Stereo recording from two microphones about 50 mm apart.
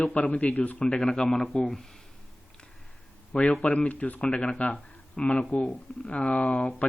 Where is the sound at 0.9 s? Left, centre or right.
Centre.